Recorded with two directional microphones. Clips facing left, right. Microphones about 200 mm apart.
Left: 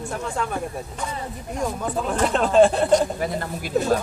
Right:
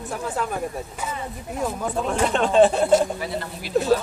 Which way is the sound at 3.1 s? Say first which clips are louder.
Left 3 dB; 50° left (ahead or behind).